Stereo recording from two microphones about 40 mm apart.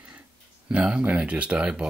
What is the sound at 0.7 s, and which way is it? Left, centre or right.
Speech, right.